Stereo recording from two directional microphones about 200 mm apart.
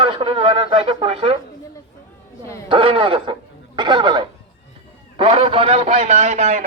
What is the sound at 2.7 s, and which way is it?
A man's voice, 25° right (ahead or behind).